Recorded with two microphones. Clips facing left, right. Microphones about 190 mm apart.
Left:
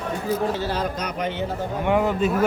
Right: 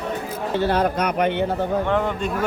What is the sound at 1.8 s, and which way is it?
Speech, 10° left (ahead or behind).